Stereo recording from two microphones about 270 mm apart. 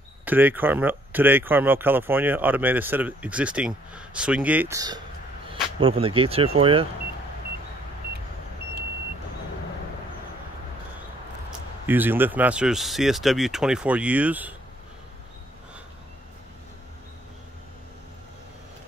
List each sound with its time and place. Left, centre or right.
0.2 s speech: centre
11.8 s speech: centre